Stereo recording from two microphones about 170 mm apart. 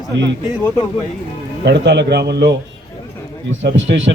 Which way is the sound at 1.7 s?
85° right.